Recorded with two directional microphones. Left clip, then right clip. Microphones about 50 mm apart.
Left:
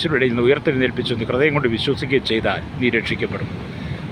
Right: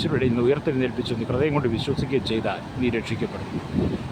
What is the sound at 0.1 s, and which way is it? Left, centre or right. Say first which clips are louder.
Speech: left 5 dB; centre.